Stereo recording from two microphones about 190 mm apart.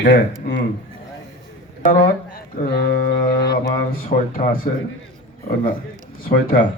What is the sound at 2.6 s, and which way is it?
A man's voice, 60° left (ahead or behind).